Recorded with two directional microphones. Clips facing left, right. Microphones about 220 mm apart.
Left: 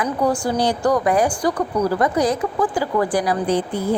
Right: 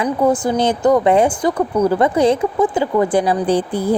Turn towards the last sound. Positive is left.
turn(degrees=-35)  # may be behind; listen again after turning